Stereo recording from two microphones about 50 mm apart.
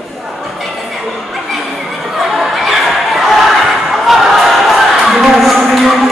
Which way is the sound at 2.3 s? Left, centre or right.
Centre.